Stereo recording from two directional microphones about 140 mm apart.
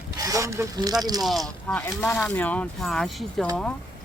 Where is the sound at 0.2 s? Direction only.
25° right (ahead or behind).